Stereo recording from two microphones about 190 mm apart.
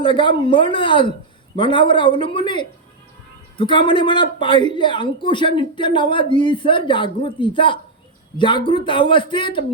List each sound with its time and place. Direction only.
0.0 s a man's voice: 25° left (ahead or behind)